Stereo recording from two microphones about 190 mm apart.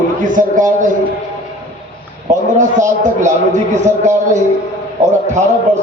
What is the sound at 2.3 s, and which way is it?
A man's voice, 40° right (ahead or behind).